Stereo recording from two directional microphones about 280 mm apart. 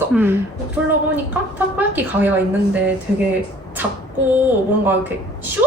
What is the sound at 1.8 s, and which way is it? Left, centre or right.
Speech, centre.